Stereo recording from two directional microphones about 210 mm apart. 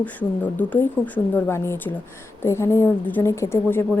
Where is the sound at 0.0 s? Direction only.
5° left (ahead or behind).